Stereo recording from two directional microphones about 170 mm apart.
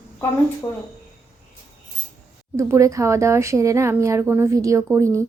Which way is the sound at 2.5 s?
15° right (ahead or behind).